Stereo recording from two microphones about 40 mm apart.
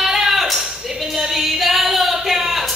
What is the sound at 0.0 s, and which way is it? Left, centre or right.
Singing, centre.